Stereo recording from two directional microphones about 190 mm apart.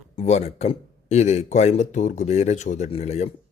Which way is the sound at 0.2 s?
35° left (ahead or behind).